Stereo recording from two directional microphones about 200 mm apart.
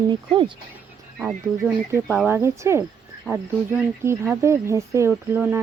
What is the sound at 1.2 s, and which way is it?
Speech, 5° right (ahead or behind).